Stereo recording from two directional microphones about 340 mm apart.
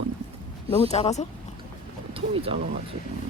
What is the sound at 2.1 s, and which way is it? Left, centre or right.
Speech, centre.